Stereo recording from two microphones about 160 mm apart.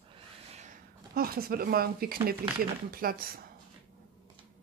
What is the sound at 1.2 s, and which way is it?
Speech, 70° right (ahead or behind).